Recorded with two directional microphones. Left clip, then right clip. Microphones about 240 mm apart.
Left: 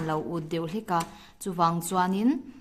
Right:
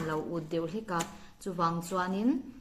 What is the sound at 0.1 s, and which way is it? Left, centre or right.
Speech, left.